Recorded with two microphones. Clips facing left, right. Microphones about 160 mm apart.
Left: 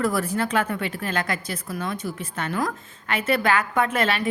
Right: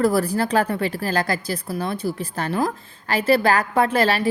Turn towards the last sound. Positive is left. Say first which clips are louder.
# right 4 dB
turn(degrees=-35)  # may be behind; listen again after turning